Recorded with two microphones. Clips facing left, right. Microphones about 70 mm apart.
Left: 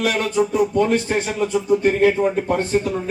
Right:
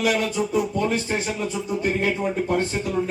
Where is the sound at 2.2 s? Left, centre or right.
Left.